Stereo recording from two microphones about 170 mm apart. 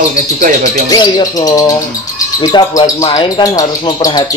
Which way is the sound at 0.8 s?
25° left (ahead or behind).